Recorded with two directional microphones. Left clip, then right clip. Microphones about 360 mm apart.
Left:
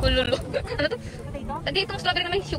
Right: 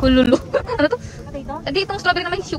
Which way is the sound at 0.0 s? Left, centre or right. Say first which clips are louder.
Right 8 dB; centre.